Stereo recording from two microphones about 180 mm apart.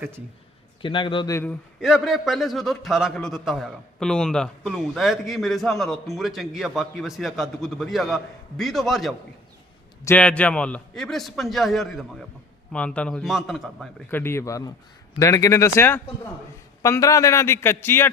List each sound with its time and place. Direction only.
0.8 s a man's voice: 30° left (ahead or behind)
1.8 s a man's voice: centre (ahead or behind)
10.0 s a man's voice: 10° left (ahead or behind)
14.1 s a man's voice: 10° left (ahead or behind)